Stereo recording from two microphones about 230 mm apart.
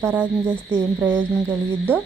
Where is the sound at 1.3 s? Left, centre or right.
Centre.